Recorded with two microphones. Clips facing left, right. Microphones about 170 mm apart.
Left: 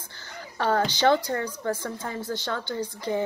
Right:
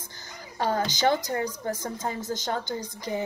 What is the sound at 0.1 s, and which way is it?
Speech, 15° right (ahead or behind).